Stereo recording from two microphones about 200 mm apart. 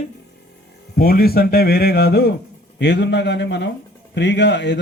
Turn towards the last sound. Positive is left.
turn(degrees=60)  # may be behind; listen again after turning